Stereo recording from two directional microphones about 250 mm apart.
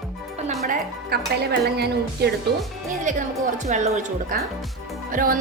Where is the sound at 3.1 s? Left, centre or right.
Right.